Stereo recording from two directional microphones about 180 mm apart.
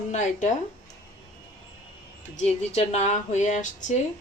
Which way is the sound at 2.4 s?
40° left (ahead or behind).